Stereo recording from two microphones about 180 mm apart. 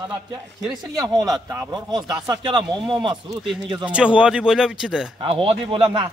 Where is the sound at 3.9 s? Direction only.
5° right (ahead or behind).